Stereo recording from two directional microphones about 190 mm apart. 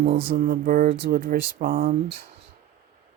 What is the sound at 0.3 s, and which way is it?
Speech, 50° right (ahead or behind).